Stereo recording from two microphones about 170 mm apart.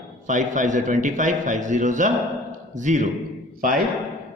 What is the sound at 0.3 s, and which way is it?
A man's voice, 50° right (ahead or behind).